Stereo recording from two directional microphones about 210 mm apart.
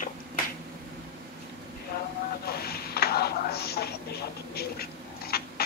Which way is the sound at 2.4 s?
50° left (ahead or behind).